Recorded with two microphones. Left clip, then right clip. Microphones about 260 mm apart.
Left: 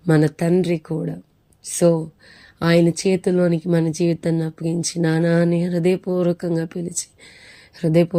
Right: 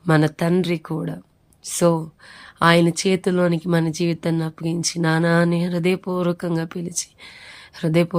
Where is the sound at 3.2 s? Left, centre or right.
Right.